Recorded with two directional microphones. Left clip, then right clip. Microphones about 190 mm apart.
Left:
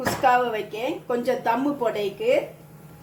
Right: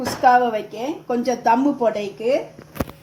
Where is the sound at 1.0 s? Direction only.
40° right (ahead or behind).